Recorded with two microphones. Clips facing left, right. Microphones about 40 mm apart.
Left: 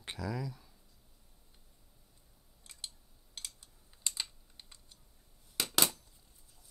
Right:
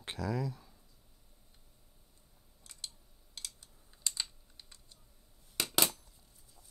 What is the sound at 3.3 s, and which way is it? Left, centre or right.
Typing, left.